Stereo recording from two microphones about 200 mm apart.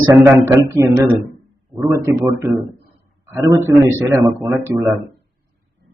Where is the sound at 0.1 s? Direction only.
15° right (ahead or behind).